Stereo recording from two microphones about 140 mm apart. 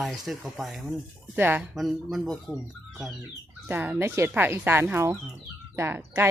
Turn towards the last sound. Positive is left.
turn(degrees=-15)  # may be behind; listen again after turning